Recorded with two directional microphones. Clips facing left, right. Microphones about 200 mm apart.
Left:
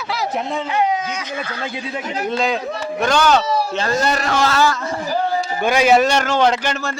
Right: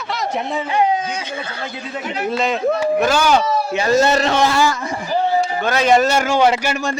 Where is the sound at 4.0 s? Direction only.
25° right (ahead or behind).